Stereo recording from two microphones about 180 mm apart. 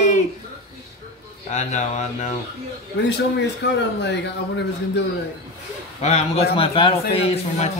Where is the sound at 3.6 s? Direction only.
75° left (ahead or behind).